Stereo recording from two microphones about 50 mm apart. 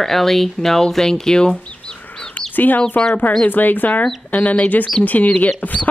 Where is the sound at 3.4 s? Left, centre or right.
Left.